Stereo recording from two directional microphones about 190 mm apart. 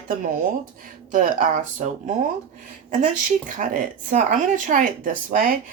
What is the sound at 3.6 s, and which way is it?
Speech, 40° right (ahead or behind).